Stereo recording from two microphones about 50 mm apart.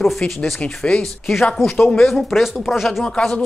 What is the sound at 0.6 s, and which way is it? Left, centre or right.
Speech, left.